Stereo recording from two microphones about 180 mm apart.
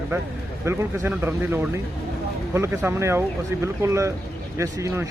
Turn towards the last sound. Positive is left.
turn(degrees=-15)  # may be behind; listen again after turning